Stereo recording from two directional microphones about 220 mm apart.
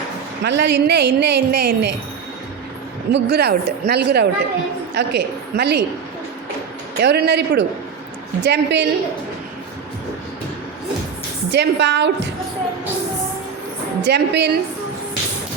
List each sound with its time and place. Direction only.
0.4 s a woman's voice: 50° right (ahead or behind)
3.1 s a woman's voice: 50° right (ahead or behind)
7.0 s a woman's voice: 50° right (ahead or behind)
11.5 s a woman's voice: 50° right (ahead or behind)
14.0 s a woman's voice: 50° right (ahead or behind)